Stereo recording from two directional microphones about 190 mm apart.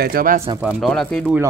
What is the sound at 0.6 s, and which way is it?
Speech, centre (ahead or behind).